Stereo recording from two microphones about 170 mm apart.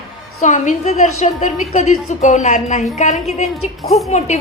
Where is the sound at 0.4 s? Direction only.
45° left (ahead or behind).